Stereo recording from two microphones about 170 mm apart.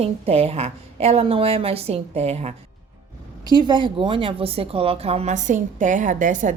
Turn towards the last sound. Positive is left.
turn(degrees=-50)  # may be behind; listen again after turning